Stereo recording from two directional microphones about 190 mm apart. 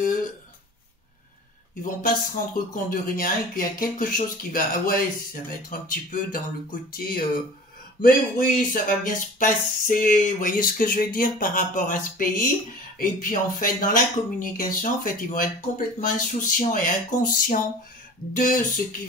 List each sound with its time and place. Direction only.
1.8 s speech: 45° left (ahead or behind)
8.0 s speech: 45° left (ahead or behind)